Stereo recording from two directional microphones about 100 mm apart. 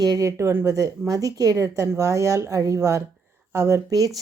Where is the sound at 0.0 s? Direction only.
40° right (ahead or behind).